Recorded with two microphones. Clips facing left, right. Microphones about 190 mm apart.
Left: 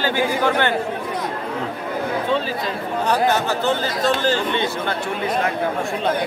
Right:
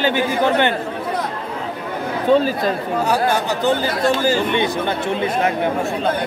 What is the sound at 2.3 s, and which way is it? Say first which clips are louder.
Speech: right 11 dB; 45° right (ahead or behind).